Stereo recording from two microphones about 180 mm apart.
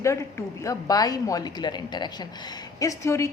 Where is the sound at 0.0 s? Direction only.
15° left (ahead or behind).